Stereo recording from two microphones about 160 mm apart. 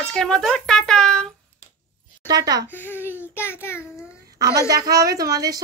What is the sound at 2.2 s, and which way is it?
Speech, 25° right (ahead or behind).